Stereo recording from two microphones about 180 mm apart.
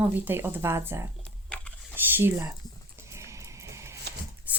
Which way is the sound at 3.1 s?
15° right (ahead or behind).